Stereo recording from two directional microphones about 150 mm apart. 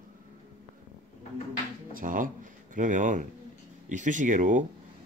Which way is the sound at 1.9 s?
65° right (ahead or behind).